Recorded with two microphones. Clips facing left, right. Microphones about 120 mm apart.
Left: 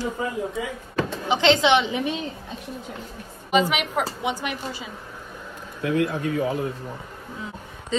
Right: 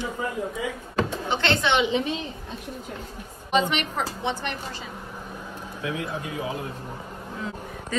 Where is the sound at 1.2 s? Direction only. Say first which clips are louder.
Left 9 dB; 15° left (ahead or behind).